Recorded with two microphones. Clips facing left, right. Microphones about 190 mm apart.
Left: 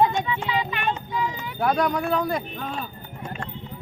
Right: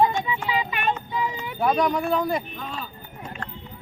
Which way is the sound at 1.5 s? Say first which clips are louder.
Right 1 dB; centre (ahead or behind).